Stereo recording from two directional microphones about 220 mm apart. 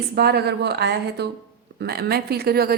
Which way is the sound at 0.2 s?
45° right (ahead or behind).